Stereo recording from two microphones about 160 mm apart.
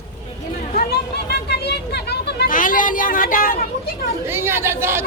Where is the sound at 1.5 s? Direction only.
90° left; by 3.5 s 60° left (ahead or behind).